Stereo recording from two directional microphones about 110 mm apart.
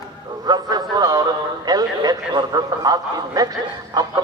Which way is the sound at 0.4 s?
40° right (ahead or behind).